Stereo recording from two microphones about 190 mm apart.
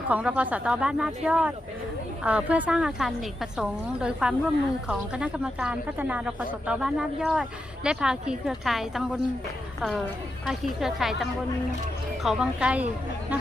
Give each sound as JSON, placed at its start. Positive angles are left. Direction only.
{"t": 0.1, "sound": "a woman's voice", "side_deg": -5}
{"t": 10.4, "sound": "a woman's voice", "side_deg": 0}